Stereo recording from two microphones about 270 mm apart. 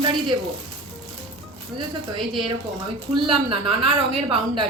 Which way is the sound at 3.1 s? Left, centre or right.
Centre.